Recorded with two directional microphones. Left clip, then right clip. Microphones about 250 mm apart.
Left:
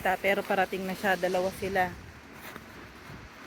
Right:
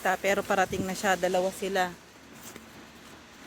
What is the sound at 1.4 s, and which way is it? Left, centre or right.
Speech, right.